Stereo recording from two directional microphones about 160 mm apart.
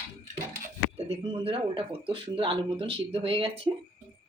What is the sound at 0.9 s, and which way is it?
Speech, 40° right (ahead or behind).